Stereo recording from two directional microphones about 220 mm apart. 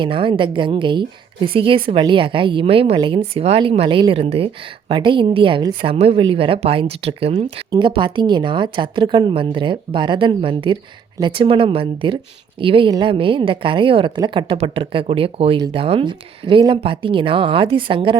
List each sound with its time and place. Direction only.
0.0 s speech: 25° right (ahead or behind)